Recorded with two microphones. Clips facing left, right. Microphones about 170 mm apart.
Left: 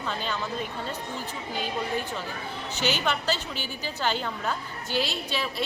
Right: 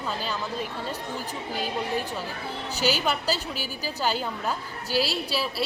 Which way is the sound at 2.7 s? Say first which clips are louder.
Right 2 dB; 35° right (ahead or behind).